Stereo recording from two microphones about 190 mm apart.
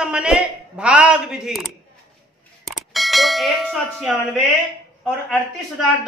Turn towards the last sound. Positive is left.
turn(degrees=5)  # may be behind; listen again after turning